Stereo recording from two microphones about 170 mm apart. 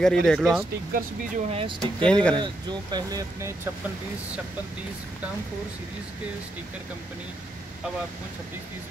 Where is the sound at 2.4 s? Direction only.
20° right (ahead or behind).